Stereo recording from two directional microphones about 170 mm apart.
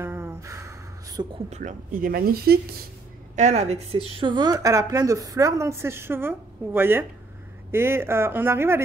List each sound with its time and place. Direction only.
0.0 s a sound: 15° right (ahead or behind)
1.5 s speech: 45° right (ahead or behind); by 2.6 s 65° right (ahead or behind)
3.3 s a woman's voice: 40° right (ahead or behind); by 8.8 s 15° right (ahead or behind)